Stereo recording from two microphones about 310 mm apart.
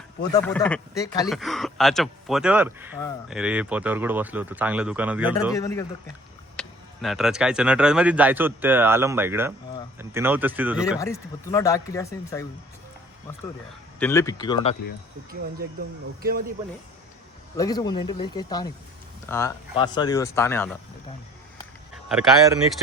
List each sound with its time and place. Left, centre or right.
0.2 s speech: centre
1.3 s speech: centre
5.5 s speech: centre
11.0 s speech: centre
14.0 s speech: centre
16.2 s speech: right
17.6 s speech: centre